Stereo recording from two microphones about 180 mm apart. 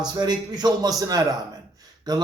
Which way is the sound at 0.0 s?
25° right (ahead or behind).